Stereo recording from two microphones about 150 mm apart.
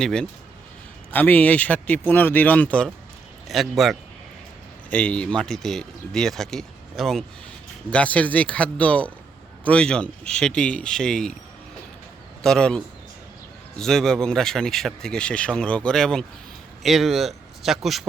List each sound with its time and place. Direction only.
0.0 s speech: 5° left (ahead or behind)
12.4 s a man's voice: 5° left (ahead or behind)